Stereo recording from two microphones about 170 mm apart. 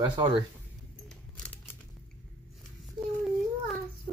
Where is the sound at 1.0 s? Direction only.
5° left (ahead or behind).